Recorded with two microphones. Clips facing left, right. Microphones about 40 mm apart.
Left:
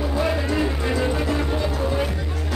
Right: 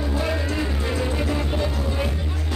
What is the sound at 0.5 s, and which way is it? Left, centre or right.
Music, centre.